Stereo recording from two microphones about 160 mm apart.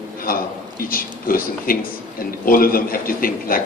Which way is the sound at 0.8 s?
65° left (ahead or behind).